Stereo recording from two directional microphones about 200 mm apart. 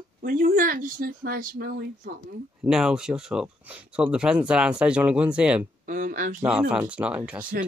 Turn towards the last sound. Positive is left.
turn(degrees=-5)  # may be behind; listen again after turning